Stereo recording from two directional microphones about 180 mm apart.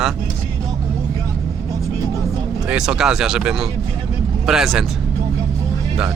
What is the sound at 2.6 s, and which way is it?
Speech, 5° right (ahead or behind).